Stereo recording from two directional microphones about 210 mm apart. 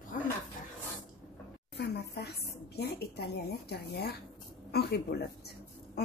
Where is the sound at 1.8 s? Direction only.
50° left (ahead or behind).